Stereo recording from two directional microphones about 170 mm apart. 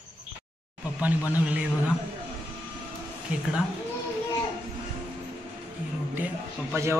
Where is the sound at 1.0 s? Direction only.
10° right (ahead or behind).